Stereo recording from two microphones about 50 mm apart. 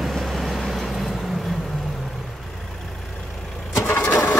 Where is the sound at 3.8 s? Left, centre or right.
Left.